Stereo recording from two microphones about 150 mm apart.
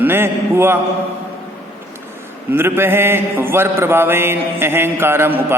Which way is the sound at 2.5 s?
15° right (ahead or behind).